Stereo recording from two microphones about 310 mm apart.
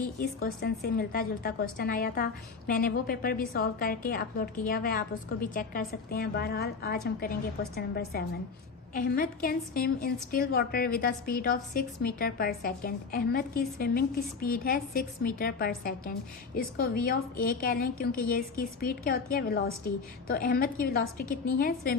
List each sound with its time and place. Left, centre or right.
0.4 s a woman's voice: left